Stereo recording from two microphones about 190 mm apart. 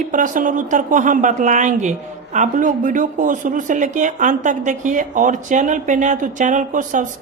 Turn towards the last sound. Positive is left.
turn(degrees=-40)  # may be behind; listen again after turning